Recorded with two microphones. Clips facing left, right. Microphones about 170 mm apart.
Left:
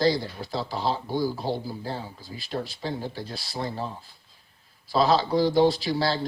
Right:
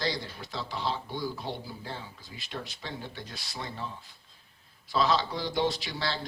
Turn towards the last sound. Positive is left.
turn(degrees=35)  # may be behind; listen again after turning